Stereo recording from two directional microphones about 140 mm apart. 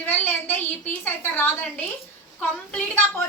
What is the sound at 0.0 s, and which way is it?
A woman's voice, 15° left (ahead or behind).